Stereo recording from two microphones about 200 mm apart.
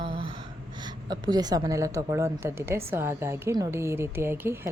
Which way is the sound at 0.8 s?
20° right (ahead or behind).